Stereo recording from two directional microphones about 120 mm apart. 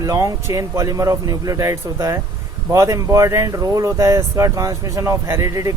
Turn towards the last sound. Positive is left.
turn(degrees=-25)  # may be behind; listen again after turning